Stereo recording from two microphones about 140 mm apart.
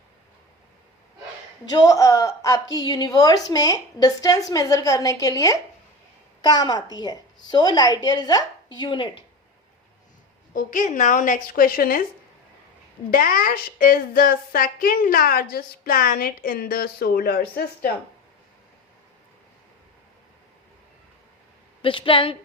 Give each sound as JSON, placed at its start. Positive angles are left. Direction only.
{"t": 1.7, "sound": "a woman's voice", "side_deg": 25}
{"t": 10.5, "sound": "speech", "side_deg": 70}
{"t": 13.1, "sound": "speech", "side_deg": 90}
{"t": 21.8, "sound": "speech", "side_deg": 35}